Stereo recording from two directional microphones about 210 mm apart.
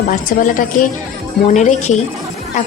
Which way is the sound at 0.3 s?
40° left (ahead or behind).